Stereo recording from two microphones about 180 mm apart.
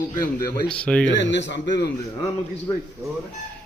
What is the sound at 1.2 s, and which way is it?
Speech, 90° left.